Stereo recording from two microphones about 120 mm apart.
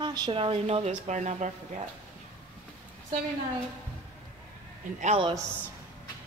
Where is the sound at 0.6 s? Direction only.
70° right (ahead or behind).